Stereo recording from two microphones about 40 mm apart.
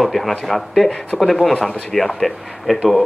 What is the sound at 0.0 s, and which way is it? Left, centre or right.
Speech, centre.